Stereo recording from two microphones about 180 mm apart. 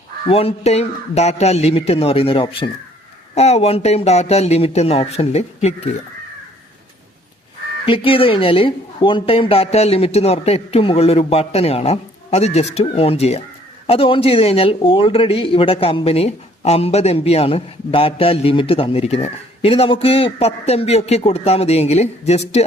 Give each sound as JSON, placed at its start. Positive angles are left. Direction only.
{"t": 0.3, "sound": "speech", "side_deg": 30}
{"t": 7.9, "sound": "speech", "side_deg": 30}